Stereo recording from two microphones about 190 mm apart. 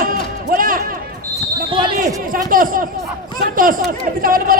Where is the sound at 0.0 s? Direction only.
45° right (ahead or behind).